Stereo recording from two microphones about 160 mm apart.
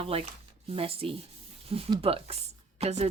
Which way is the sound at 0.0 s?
35° right (ahead or behind).